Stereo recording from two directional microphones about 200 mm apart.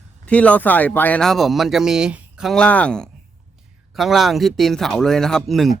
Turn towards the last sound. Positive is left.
turn(degrees=0)  # may be behind; listen again after turning